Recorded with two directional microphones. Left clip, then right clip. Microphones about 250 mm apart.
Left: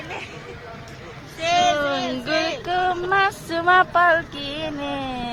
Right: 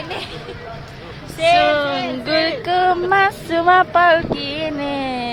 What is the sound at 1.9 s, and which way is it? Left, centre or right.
Child singing, left.